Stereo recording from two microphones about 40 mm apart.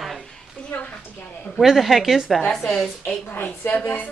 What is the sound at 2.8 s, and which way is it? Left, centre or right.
Speech, left.